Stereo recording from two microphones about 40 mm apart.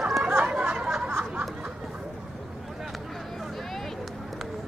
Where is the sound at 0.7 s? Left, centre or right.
Centre.